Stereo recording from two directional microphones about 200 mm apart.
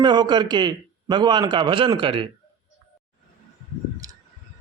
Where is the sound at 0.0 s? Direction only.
20° right (ahead or behind).